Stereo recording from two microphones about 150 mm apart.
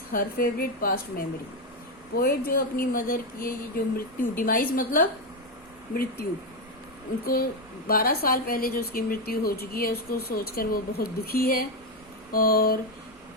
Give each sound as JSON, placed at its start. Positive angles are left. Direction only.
{"t": 0.1, "sound": "a woman's voice", "side_deg": 75}
{"t": 5.9, "sound": "speech", "side_deg": 80}
{"t": 7.9, "sound": "speech", "side_deg": 85}